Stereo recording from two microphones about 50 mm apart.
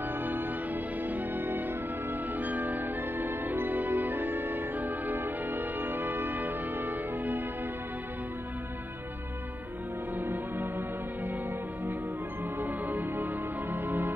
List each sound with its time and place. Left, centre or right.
0.2 s music: right
10.1 s music: right
12.5 s music: right